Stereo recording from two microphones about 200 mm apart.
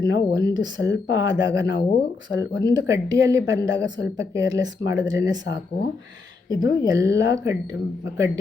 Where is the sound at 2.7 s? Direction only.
15° right (ahead or behind).